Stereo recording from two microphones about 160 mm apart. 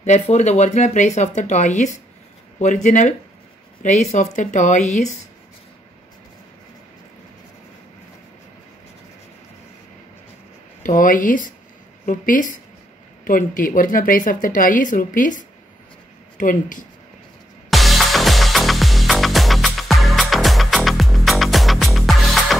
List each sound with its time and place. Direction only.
0.0 s speech: 45° left (ahead or behind)
10.8 s a woman's voice: 60° left (ahead or behind)
17.6 s music: centre (ahead or behind)